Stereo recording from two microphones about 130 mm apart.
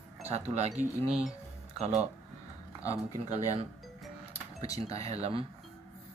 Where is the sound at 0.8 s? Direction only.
5° right (ahead or behind).